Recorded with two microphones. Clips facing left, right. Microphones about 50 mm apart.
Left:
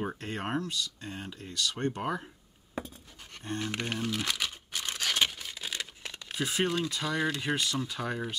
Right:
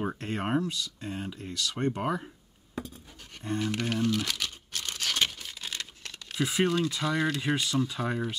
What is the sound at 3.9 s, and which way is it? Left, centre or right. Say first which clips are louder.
Crumpling: right 3 dB; centre.